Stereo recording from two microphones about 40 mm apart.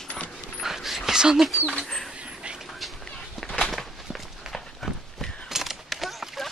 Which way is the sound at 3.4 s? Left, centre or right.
Centre.